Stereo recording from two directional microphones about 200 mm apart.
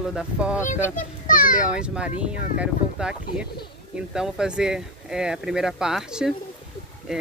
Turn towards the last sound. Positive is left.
turn(degrees=-5)  # may be behind; listen again after turning